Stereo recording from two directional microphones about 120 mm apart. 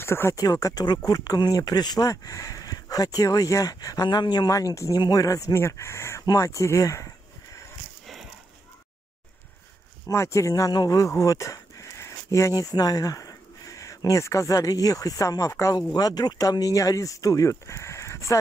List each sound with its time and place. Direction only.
0.0 s speech: 20° left (ahead or behind)
10.0 s speech: 25° left (ahead or behind)